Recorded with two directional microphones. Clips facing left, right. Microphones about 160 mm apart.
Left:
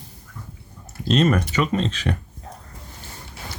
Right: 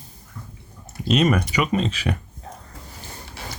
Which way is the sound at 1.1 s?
10° right (ahead or behind).